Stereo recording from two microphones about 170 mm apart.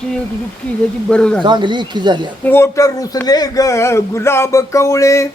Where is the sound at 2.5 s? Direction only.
15° left (ahead or behind).